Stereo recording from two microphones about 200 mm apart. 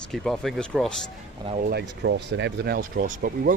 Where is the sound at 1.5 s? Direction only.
50° right (ahead or behind).